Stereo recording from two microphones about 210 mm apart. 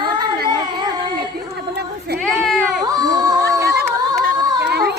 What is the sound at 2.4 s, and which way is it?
Baby cry, centre (ahead or behind).